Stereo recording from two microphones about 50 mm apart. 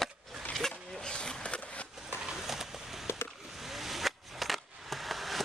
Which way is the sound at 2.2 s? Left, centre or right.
Centre.